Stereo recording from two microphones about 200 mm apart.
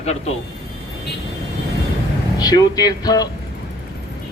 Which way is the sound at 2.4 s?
20° left (ahead or behind).